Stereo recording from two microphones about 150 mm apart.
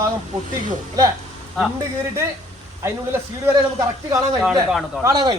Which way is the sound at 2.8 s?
20° right (ahead or behind).